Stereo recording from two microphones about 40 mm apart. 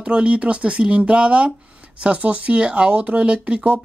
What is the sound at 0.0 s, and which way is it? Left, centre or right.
Speech, right.